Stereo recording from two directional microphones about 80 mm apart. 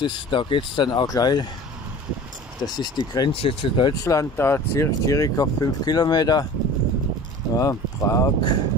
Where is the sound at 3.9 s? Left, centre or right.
Left.